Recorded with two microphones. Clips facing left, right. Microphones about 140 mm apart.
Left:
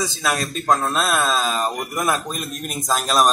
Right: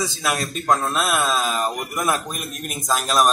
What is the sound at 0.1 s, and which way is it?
A man's voice, centre (ahead or behind).